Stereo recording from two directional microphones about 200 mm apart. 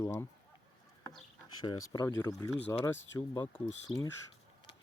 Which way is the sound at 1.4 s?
20° left (ahead or behind).